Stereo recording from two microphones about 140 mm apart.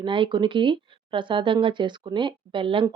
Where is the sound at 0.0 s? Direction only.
35° right (ahead or behind).